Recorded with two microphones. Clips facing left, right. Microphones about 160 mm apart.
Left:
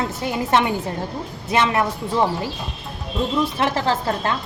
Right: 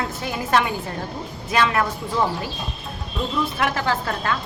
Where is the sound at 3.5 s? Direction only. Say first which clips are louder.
Left 2 dB; 30° left (ahead or behind).